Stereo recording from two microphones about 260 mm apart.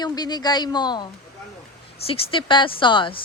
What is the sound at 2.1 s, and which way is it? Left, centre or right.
Speech, centre.